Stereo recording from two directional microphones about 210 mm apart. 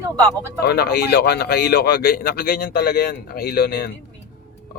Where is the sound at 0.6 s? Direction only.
50° left (ahead or behind).